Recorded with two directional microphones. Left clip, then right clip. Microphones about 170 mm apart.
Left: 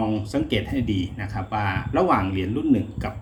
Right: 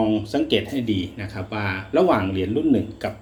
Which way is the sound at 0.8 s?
45° left (ahead or behind).